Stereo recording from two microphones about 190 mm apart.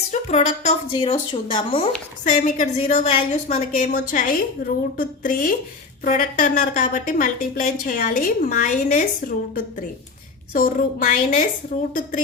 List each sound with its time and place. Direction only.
0.1 s speech: 35° left (ahead or behind)
2.2 s a woman's voice: 40° left (ahead or behind)